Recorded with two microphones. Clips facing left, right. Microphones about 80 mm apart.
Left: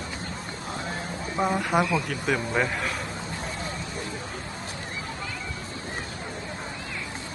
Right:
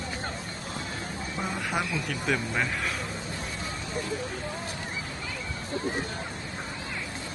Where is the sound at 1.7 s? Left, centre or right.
Left.